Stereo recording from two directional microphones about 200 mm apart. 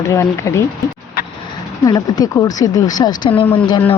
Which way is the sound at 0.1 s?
15° left (ahead or behind).